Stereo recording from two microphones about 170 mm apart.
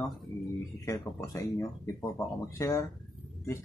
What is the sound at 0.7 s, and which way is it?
Speech, 15° left (ahead or behind).